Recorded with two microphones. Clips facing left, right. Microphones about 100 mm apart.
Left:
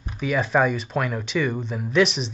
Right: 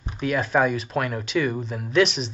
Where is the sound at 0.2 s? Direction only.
Centre (ahead or behind).